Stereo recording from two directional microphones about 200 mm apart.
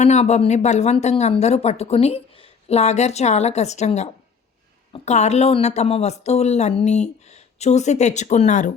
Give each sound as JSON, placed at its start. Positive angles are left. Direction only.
{"t": 0.0, "sound": "speech", "side_deg": 35}